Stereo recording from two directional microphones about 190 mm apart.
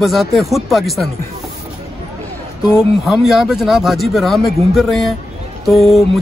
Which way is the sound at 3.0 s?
Centre (ahead or behind).